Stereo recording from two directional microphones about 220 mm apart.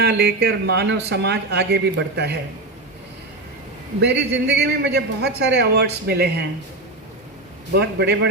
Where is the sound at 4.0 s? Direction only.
50° right (ahead or behind).